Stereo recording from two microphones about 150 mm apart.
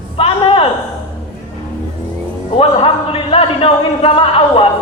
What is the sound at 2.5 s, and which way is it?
A man's voice, 40° left (ahead or behind).